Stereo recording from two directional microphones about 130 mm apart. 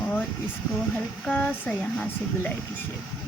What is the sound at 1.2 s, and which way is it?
A woman's voice, 10° left (ahead or behind).